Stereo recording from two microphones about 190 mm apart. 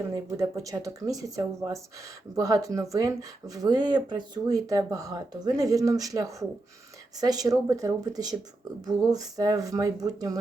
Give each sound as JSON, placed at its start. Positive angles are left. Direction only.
{"t": 0.0, "sound": "speech", "side_deg": -15}